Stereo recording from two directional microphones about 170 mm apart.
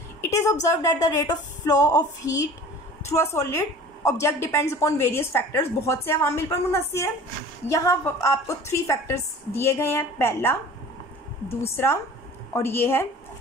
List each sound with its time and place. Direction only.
0.3 s a woman's voice: 20° left (ahead or behind)
11.7 s a woman's voice: 15° left (ahead or behind)